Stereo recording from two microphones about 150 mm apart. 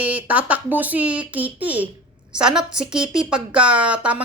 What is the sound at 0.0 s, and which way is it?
A woman's voice, 10° right (ahead or behind).